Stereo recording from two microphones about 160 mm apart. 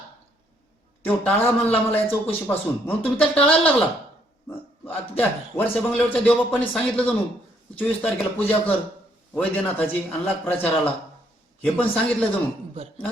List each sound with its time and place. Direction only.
1.0 s a man's voice: 10° left (ahead or behind)